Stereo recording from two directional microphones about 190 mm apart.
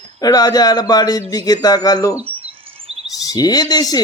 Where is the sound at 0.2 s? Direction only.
20° left (ahead or behind).